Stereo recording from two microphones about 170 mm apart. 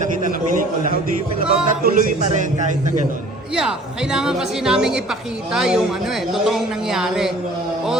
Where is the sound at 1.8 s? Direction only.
50° right (ahead or behind).